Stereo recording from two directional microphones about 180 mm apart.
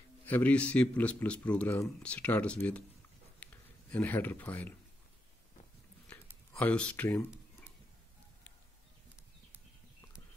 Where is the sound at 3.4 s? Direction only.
5° left (ahead or behind).